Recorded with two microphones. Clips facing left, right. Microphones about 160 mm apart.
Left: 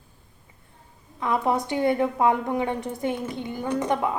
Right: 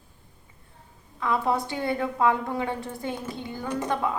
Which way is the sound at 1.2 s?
20° left (ahead or behind).